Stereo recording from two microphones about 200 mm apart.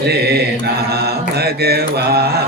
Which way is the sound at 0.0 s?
55° right (ahead or behind).